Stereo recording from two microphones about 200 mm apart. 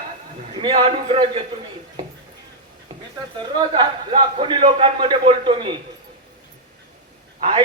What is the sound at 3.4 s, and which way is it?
A man's voice, 25° right (ahead or behind).